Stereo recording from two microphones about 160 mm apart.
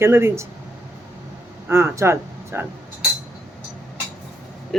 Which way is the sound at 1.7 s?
15° right (ahead or behind).